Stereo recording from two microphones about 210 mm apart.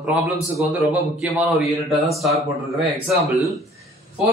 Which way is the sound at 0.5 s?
Centre (ahead or behind).